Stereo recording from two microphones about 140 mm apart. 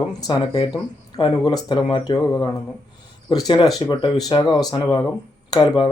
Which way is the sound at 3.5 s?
30° left (ahead or behind).